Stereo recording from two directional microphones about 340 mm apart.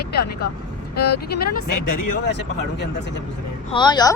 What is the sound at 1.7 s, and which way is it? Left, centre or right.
Speech, left.